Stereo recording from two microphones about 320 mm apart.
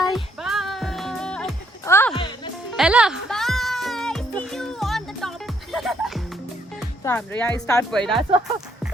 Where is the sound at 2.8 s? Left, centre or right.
Centre.